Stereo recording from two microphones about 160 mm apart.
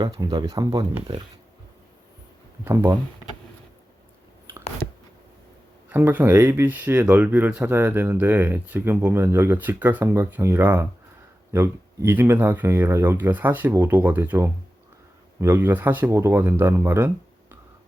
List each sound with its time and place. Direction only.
0.0 s speech: 25° right (ahead or behind)
5.9 s speech: 10° right (ahead or behind)